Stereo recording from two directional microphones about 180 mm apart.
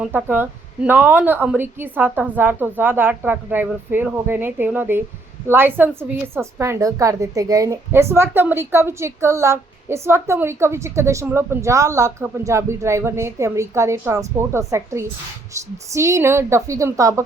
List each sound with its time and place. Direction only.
0.0 s a woman's voice: 10° right (ahead or behind)